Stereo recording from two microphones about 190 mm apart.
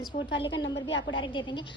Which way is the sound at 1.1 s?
25° left (ahead or behind).